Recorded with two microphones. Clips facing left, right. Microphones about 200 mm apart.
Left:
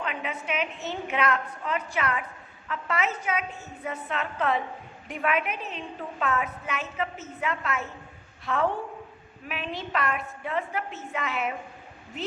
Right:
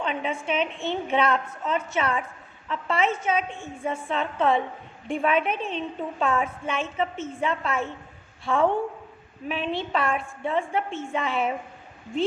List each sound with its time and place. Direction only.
0.0 s a woman's voice: 25° right (ahead or behind)
9.5 s a woman's voice: 30° right (ahead or behind)